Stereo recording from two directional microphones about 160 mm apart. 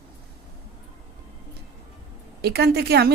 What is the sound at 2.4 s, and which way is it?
Speech, 90° right.